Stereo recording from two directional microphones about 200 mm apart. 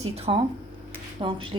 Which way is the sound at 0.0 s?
30° right (ahead or behind).